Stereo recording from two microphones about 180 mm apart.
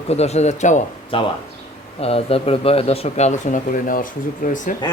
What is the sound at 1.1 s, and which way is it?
Speech, 30° left (ahead or behind).